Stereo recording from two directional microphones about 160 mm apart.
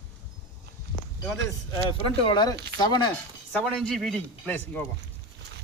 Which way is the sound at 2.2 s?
25° left (ahead or behind).